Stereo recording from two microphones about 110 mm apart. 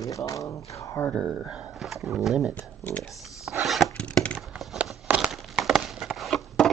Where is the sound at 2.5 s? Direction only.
15° left (ahead or behind).